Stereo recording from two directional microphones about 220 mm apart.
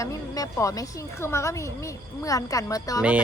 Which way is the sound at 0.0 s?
15° left (ahead or behind).